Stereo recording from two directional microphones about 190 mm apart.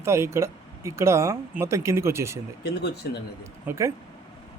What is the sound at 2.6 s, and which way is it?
Speech, 60° left (ahead or behind).